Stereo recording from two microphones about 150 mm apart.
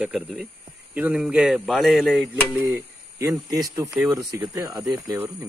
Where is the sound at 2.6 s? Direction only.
20° right (ahead or behind).